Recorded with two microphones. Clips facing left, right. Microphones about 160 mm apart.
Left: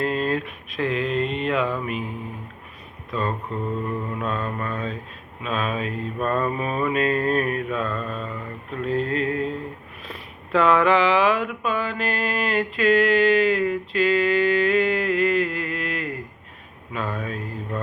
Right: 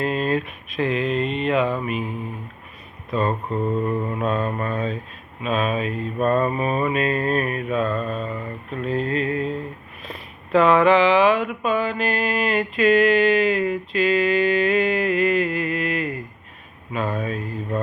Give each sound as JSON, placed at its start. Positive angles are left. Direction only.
{"t": 0.0, "sound": "mantra", "side_deg": -10}
{"t": 3.1, "sound": "speech", "side_deg": -20}
{"t": 4.3, "sound": "mantra", "side_deg": -15}
{"t": 8.8, "sound": "a sound", "side_deg": -5}
{"t": 10.0, "sound": "speech", "side_deg": -10}